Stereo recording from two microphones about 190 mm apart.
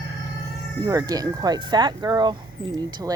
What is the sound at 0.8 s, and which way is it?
Speech, 20° right (ahead or behind).